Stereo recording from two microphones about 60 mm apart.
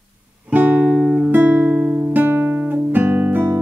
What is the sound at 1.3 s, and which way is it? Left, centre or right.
Music, right.